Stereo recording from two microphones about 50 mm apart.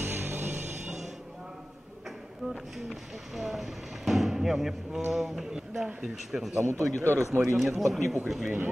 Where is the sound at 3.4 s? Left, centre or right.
Centre.